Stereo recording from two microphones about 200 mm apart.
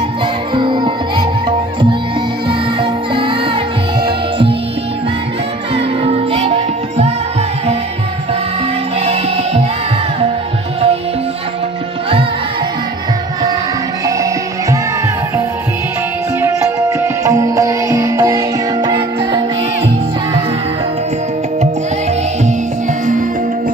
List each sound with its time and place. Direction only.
0.6 s music: 25° right (ahead or behind)
2.8 s music: 25° right (ahead or behind)
5.8 s music: 30° right (ahead or behind)
9.0 s music: 30° right (ahead or behind)
16.3 s music: 10° right (ahead or behind)